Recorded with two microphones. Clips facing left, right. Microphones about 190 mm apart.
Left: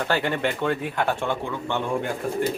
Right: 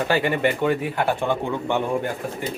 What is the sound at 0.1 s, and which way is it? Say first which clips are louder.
Speech: right 4 dB; 10° right (ahead or behind).